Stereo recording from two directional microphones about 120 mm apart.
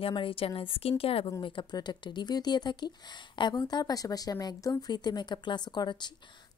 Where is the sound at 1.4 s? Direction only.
40° left (ahead or behind).